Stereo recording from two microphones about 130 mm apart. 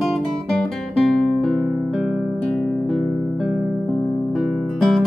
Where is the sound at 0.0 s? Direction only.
Centre (ahead or behind).